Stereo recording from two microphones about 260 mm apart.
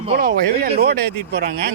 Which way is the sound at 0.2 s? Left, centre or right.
Right.